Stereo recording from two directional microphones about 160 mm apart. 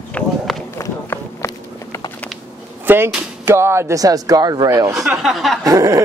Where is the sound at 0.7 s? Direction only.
15° left (ahead or behind).